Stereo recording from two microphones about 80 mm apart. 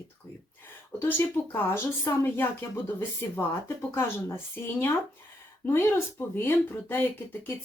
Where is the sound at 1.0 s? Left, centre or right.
Left.